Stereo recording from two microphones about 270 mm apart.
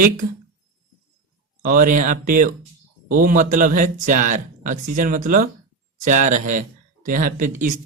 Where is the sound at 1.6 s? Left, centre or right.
Right.